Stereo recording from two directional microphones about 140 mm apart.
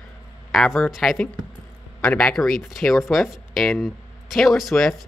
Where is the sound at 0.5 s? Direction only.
Centre (ahead or behind).